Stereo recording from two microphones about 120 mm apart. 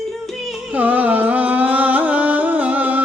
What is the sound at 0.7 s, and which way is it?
Music, 15° right (ahead or behind).